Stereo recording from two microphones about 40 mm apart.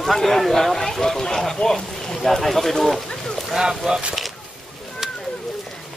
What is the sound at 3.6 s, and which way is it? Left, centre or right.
Speech, centre.